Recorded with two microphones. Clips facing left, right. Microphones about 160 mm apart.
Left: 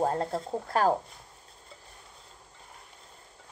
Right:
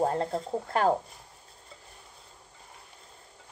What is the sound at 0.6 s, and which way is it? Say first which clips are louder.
Speech: even; 20° right (ahead or behind).